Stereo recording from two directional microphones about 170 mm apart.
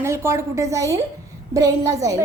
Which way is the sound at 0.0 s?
15° right (ahead or behind).